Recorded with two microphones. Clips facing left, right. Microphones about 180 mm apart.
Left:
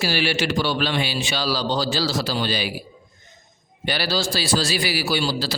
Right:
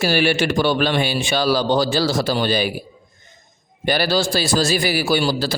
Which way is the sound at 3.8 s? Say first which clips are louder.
Right 5 dB; 50° right (ahead or behind).